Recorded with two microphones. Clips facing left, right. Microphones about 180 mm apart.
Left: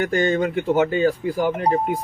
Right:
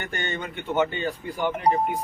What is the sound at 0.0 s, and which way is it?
Speech, 90° left.